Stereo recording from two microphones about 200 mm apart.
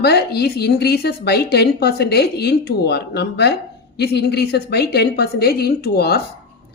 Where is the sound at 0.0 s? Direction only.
55° left (ahead or behind).